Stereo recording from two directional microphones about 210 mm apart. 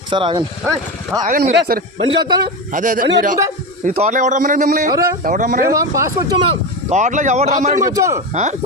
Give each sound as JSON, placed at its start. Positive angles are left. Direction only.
{"t": 0.1, "sound": "speech", "side_deg": -25}
{"t": 1.2, "sound": "a man's voice", "side_deg": -40}
{"t": 1.5, "sound": "a man's voice", "side_deg": -50}
{"t": 2.0, "sound": "speech", "side_deg": -20}
{"t": 2.7, "sound": "a man's voice", "side_deg": -40}
{"t": 5.6, "sound": "speech", "side_deg": -15}
{"t": 6.9, "sound": "a man's voice", "side_deg": -35}
{"t": 7.9, "sound": "speech", "side_deg": -15}
{"t": 8.3, "sound": "a man's voice", "side_deg": -35}